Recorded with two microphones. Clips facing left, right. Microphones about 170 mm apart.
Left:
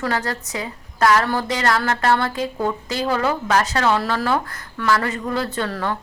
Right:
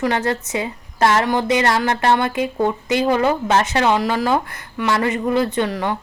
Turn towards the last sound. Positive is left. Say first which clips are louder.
# right 3 dB
turn(degrees=-15)  # may be behind; listen again after turning